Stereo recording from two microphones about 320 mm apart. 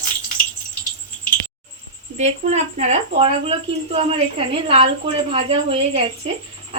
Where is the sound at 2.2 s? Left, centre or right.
Right.